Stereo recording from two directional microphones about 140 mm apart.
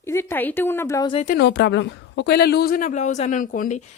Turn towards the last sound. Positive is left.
turn(degrees=70)  # may be behind; listen again after turning